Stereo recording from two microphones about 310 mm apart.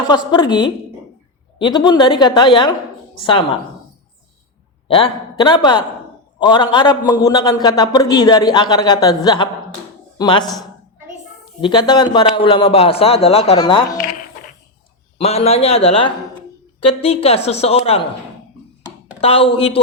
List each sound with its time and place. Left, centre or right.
0.0 s a man's voice: centre
4.9 s a man's voice: centre
11.6 s a man's voice: centre
15.2 s a woman's voice: centre
19.2 s a woman's voice: centre